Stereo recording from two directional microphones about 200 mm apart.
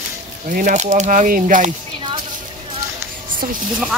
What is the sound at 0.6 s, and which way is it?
Speech, 40° right (ahead or behind).